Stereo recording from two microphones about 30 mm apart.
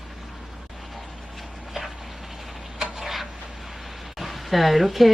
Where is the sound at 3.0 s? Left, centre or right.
Centre.